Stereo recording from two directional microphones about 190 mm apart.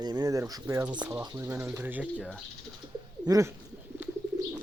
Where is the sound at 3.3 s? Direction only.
15° right (ahead or behind).